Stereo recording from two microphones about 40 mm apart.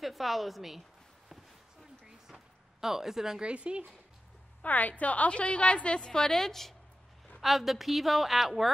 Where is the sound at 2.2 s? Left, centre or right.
Centre.